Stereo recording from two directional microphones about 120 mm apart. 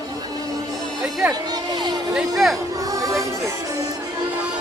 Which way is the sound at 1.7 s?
40° right (ahead or behind).